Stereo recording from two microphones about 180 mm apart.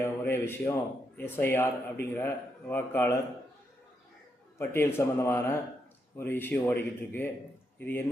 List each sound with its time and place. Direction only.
0.0 s a man's voice: 15° left (ahead or behind)
4.5 s speech: 15° left (ahead or behind)